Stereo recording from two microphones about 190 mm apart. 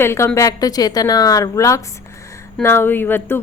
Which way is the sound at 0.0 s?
15° left (ahead or behind).